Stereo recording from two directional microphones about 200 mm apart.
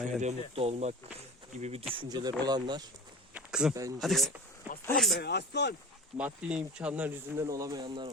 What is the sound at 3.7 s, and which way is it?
Speech, 15° right (ahead or behind).